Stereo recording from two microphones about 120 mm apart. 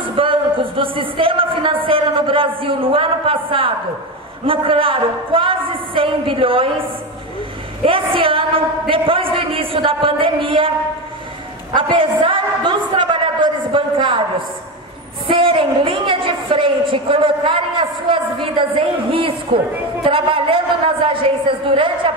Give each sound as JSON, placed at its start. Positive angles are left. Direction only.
{"t": 0.0, "sound": "a woman's voice", "side_deg": -45}
{"t": 7.8, "sound": "a woman's voice", "side_deg": -45}
{"t": 11.7, "sound": "a woman's voice", "side_deg": -45}
{"t": 15.2, "sound": "a woman's voice", "side_deg": -50}